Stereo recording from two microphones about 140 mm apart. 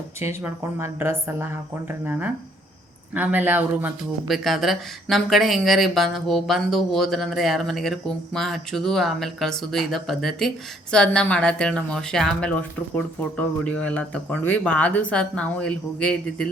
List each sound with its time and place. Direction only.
0.2 s speech: 20° right (ahead or behind)
4.3 s speech: centre (ahead or behind)